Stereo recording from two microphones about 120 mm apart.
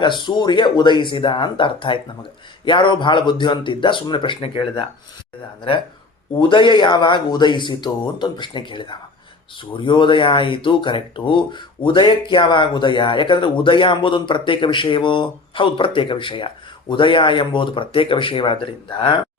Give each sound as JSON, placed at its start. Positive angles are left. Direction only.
{"t": 0.0, "sound": "speech", "side_deg": 40}
{"t": 6.5, "sound": "speech", "side_deg": 40}